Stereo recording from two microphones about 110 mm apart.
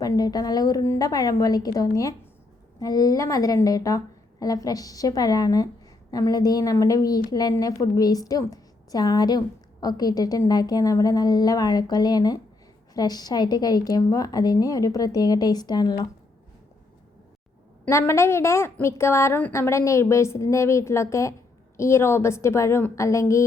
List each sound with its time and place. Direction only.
0.0 s a woman's voice: 35° left (ahead or behind)
17.8 s a woman's voice: 25° left (ahead or behind)